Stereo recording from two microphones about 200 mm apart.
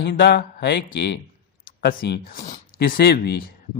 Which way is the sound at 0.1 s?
50° left (ahead or behind).